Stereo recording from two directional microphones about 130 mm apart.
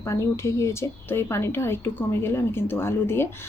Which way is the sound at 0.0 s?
20° left (ahead or behind).